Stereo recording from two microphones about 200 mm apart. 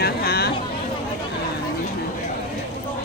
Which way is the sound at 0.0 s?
50° left (ahead or behind).